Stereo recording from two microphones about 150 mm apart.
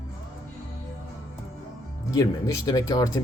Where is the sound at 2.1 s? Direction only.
20° left (ahead or behind).